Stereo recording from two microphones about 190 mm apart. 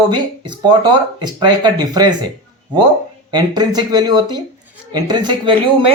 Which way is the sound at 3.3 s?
20° right (ahead or behind).